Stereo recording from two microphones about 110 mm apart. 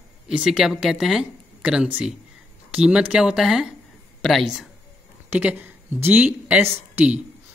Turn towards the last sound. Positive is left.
turn(degrees=-15)  # may be behind; listen again after turning